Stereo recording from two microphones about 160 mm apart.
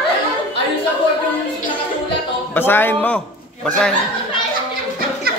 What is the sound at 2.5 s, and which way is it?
A man's voice, 15° left (ahead or behind).